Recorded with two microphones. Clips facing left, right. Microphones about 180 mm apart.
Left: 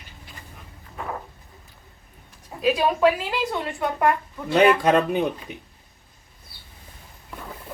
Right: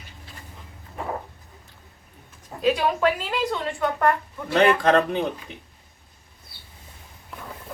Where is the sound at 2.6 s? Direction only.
5° left (ahead or behind).